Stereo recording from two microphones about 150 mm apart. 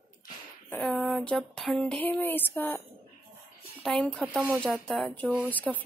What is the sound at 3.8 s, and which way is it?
Speech, 5° left (ahead or behind).